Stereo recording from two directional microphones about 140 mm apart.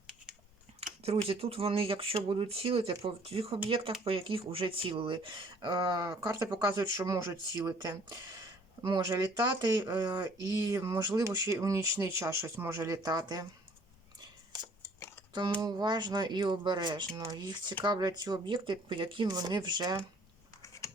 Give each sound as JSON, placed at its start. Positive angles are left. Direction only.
{"t": 1.0, "sound": "speech", "side_deg": -45}
{"t": 14.8, "sound": "a sound", "side_deg": 15}
{"t": 15.3, "sound": "speech", "side_deg": -35}
{"t": 20.6, "sound": "computer keyboard", "side_deg": 20}